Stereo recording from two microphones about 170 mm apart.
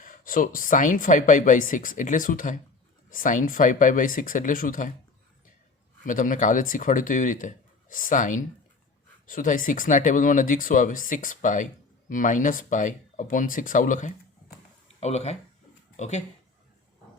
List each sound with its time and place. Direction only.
0.0 s speech: 55° left (ahead or behind)
6.0 s speech: 50° left (ahead or behind)